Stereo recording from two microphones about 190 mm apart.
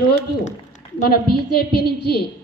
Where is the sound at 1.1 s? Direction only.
55° left (ahead or behind).